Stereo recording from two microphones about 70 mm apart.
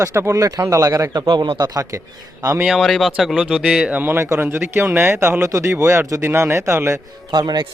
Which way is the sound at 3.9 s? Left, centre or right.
Right.